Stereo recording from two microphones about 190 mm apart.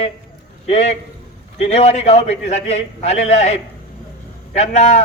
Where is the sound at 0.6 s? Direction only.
35° left (ahead or behind).